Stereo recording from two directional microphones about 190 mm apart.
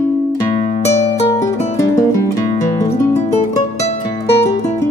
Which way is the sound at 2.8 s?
35° left (ahead or behind).